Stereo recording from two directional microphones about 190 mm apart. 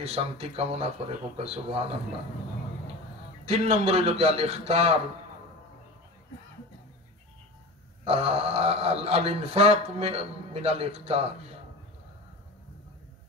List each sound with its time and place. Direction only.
0.0 s speech: 30° right (ahead or behind)
3.4 s speech: 35° right (ahead or behind)
8.0 s speech: 30° right (ahead or behind)